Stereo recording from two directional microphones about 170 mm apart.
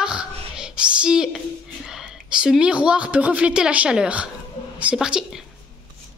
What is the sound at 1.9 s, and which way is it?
A woman's voice, 5° right (ahead or behind).